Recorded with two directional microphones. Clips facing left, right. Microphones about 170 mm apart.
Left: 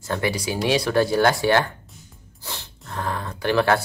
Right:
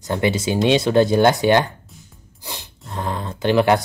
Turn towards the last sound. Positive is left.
turn(degrees=-15)  # may be behind; listen again after turning